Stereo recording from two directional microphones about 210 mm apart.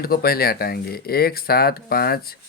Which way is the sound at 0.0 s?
45° left (ahead or behind).